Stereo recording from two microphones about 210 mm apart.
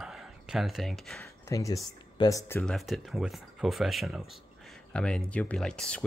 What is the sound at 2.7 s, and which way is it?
Speech, centre (ahead or behind).